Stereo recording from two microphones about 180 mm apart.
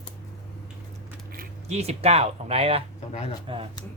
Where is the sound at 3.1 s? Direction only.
35° left (ahead or behind).